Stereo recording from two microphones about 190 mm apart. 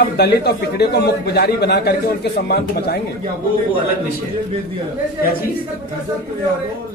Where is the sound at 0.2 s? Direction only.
60° left (ahead or behind).